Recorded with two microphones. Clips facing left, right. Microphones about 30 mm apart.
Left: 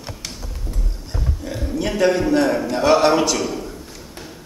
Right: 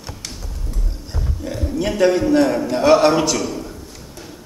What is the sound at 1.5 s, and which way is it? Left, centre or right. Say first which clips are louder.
A man's voice: right 2 dB; centre.